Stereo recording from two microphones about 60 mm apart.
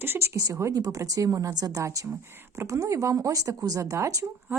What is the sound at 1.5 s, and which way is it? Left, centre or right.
A woman's voice, right.